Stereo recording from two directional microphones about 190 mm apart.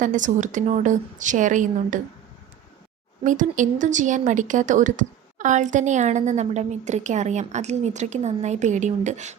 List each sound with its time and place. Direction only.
0.0 s a woman's voice: 40° right (ahead or behind)
3.2 s a woman's voice: 40° right (ahead or behind)